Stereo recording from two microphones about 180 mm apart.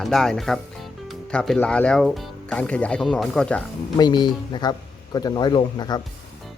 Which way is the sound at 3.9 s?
25° left (ahead or behind).